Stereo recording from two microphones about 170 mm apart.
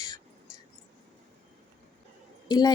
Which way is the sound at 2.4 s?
20° left (ahead or behind).